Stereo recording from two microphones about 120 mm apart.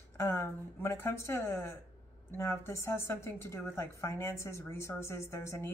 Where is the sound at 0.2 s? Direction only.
20° left (ahead or behind).